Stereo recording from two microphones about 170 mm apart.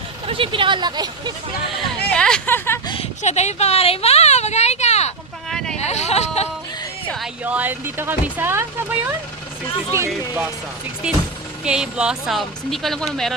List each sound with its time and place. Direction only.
0.3 s speech: 30° right (ahead or behind)
2.0 s speech: 5° left (ahead or behind)
2.8 s a sound: 30° left (ahead or behind)
3.2 s speech: 40° left (ahead or behind)
5.5 s a sound: 5° left (ahead or behind)
5.8 s speech: 40° left (ahead or behind)
7.4 s speech: 10° right (ahead or behind)
11.0 s speech: 5° right (ahead or behind)